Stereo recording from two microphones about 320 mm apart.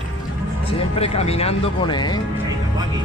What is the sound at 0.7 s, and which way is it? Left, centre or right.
Music, centre.